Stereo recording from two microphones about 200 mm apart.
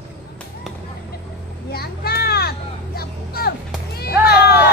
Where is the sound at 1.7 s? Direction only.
50° left (ahead or behind).